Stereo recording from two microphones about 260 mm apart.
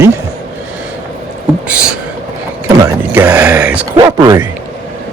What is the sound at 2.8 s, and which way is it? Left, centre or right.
Speech, centre.